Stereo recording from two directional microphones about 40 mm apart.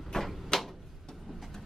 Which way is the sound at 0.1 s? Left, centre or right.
Centre.